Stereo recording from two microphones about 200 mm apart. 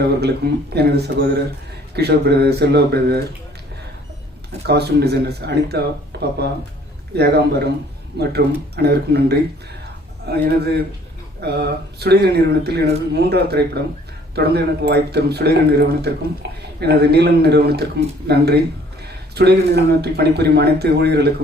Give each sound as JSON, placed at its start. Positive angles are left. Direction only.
{"t": 0.0, "sound": "speech", "side_deg": -55}
{"t": 4.6, "sound": "speech", "side_deg": -55}
{"t": 6.1, "sound": "a sound", "side_deg": -55}
{"t": 7.2, "sound": "speech", "side_deg": -55}